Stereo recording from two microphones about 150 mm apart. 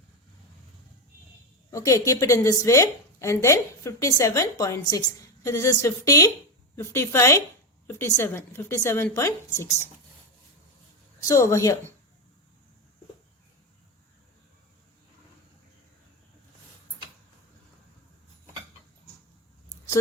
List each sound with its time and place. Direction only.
1.7 s a woman's voice: 20° left (ahead or behind)
11.2 s a woman's voice: 20° left (ahead or behind)